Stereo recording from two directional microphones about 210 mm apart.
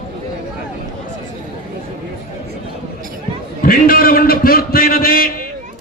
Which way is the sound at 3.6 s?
45° left (ahead or behind).